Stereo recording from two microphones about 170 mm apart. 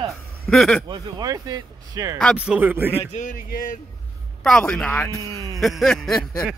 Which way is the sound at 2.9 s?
45° left (ahead or behind).